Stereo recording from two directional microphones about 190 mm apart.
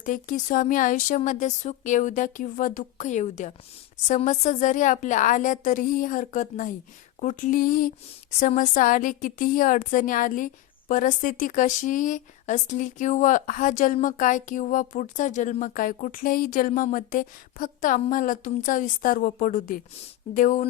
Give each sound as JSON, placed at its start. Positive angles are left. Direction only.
{"t": 0.0, "sound": "a woman's voice", "side_deg": 45}